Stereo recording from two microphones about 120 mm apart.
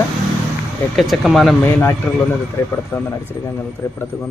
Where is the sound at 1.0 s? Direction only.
Centre (ahead or behind).